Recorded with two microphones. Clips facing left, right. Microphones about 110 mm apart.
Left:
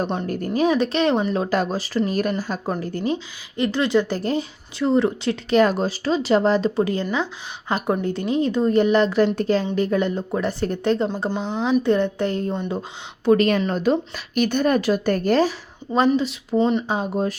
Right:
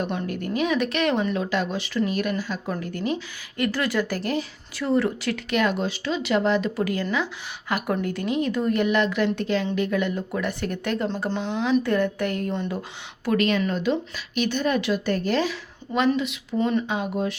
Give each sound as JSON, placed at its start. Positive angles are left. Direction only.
{"t": 0.0, "sound": "speech", "side_deg": 35}
{"t": 11.4, "sound": "speech", "side_deg": 40}
{"t": 11.8, "sound": "speech", "side_deg": 25}
{"t": 13.2, "sound": "speech", "side_deg": 35}